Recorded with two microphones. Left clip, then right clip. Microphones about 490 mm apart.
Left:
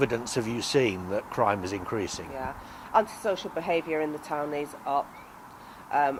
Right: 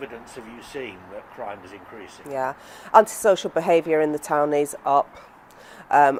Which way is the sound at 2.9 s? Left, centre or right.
Right.